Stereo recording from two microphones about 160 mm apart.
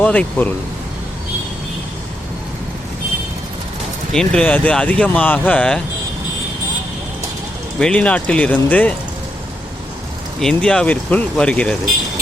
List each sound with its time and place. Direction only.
0.0 s speech: 10° left (ahead or behind)
4.1 s speech: 5° left (ahead or behind)
7.8 s speech: 5° left (ahead or behind)
10.4 s speech: 5° left (ahead or behind)